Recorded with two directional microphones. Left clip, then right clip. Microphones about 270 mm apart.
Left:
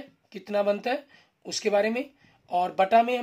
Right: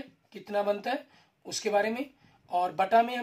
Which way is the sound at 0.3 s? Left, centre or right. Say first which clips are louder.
Left 4 dB; left.